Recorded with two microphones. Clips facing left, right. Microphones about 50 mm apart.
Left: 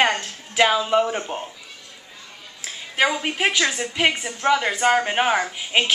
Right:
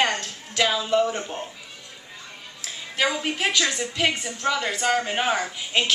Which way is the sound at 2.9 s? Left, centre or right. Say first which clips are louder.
Left 3 dB; centre.